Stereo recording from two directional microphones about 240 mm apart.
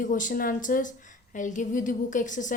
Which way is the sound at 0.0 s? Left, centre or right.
Left.